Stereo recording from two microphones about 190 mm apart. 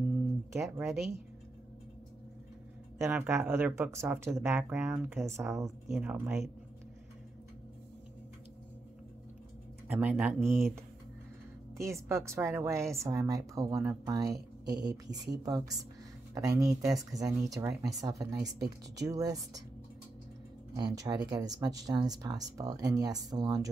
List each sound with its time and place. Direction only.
0.5 s speech: 15° right (ahead or behind)
3.0 s speech: 10° right (ahead or behind)
9.8 s speech: 5° right (ahead or behind)
11.7 s speech: 15° right (ahead or behind)
20.7 s speech: 20° right (ahead or behind)